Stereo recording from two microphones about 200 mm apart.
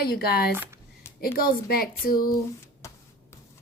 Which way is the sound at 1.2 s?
50° left (ahead or behind).